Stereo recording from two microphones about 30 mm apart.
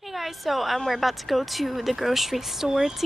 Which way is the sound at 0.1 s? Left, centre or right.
Centre.